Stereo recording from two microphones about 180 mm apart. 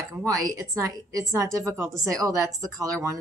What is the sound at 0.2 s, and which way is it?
A woman's voice, 20° right (ahead or behind).